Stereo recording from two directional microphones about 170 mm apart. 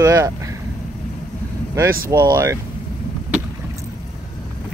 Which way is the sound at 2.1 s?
20° right (ahead or behind).